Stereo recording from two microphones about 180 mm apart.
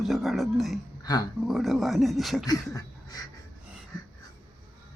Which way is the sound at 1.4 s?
Centre (ahead or behind).